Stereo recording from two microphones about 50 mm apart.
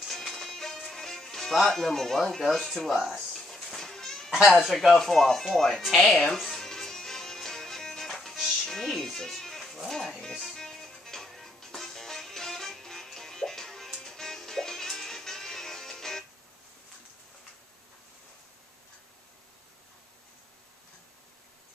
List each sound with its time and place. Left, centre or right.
0.0 s music: centre
2.9 s a sound: centre
4.3 s speech: centre
4.9 s speech: centre
6.3 s music: centre
9.0 s speech: centre
10.4 s music: centre